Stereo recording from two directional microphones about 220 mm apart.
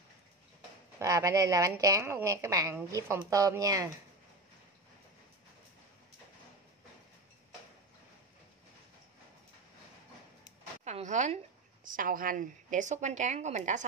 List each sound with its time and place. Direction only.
0.9 s a woman's voice: 15° right (ahead or behind)
10.8 s a sound: 30° right (ahead or behind)
11.8 s speech: 40° right (ahead or behind)